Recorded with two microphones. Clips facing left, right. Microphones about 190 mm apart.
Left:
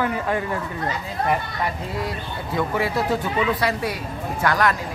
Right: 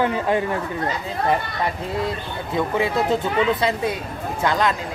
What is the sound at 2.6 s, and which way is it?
Speech, 20° right (ahead or behind).